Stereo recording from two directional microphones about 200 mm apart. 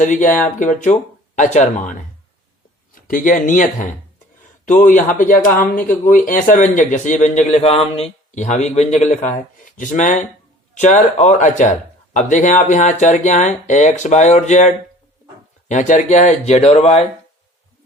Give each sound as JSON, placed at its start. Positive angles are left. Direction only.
{"t": 0.0, "sound": "speech", "side_deg": 40}
{"t": 15.7, "sound": "speech", "side_deg": 35}